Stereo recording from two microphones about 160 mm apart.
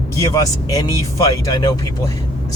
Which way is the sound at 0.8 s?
25° left (ahead or behind).